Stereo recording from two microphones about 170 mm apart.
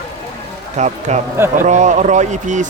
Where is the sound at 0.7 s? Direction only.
45° right (ahead or behind).